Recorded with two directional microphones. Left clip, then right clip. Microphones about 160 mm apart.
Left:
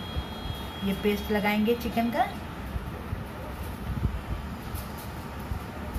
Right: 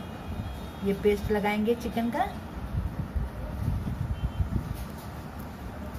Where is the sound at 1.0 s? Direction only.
20° right (ahead or behind).